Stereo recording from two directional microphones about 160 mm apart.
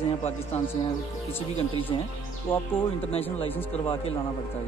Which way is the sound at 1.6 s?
35° left (ahead or behind).